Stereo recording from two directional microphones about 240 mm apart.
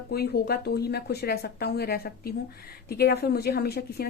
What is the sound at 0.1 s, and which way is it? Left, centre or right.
A woman's voice, left.